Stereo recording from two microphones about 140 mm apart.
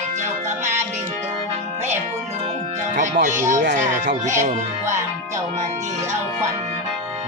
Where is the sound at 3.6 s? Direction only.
65° right (ahead or behind).